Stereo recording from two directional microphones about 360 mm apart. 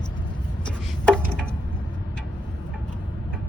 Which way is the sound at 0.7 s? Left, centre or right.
Centre.